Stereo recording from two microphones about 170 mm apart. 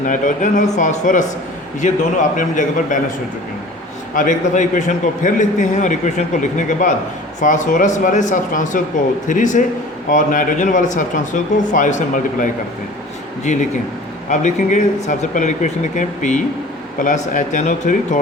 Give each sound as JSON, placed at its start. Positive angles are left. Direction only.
{"t": 0.0, "sound": "a man's voice", "side_deg": 50}
{"t": 4.1, "sound": "a man's voice", "side_deg": 50}